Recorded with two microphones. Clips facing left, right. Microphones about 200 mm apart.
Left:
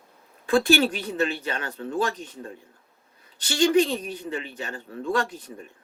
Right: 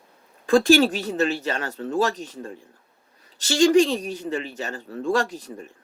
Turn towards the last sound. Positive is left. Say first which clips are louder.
# right 3 dB
turn(degrees=-40)  # may be behind; listen again after turning